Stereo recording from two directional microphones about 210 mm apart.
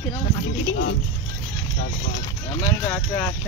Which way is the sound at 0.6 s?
50° left (ahead or behind).